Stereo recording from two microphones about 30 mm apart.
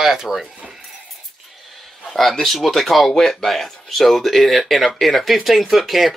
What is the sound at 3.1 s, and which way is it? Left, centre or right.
Speech, centre.